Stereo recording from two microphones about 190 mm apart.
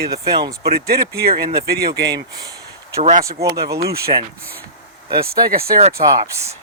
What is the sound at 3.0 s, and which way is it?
Speech, 40° right (ahead or behind).